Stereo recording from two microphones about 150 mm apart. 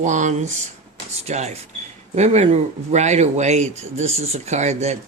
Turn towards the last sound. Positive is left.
turn(degrees=-50)  # may be behind; listen again after turning